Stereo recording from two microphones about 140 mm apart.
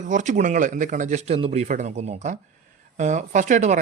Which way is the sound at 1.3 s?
45° right (ahead or behind).